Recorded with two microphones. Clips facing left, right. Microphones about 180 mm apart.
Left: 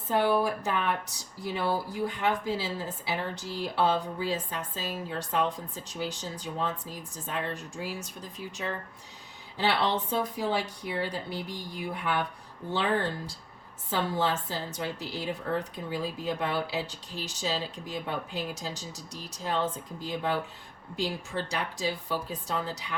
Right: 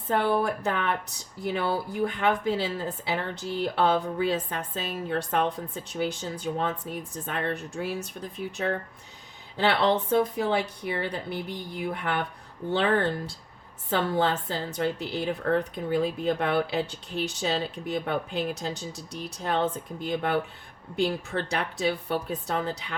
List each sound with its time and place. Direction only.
0.1 s speech: 60° right (ahead or behind)